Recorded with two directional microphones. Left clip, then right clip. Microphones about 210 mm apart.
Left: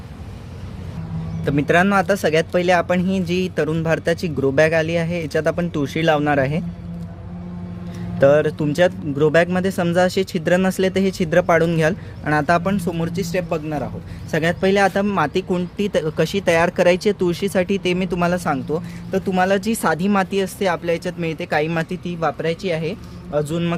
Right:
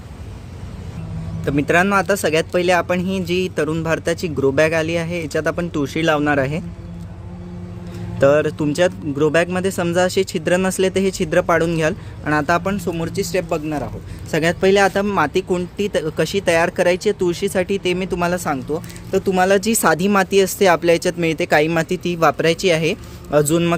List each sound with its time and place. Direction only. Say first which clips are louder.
1.5 s speech: right 1 dB; 5° right (ahead or behind)
8.2 s speech: even; 5° right (ahead or behind)
19.1 s speech: right 3 dB; 15° right (ahead or behind)